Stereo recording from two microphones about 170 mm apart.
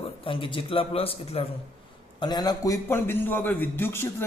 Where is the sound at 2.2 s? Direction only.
25° left (ahead or behind).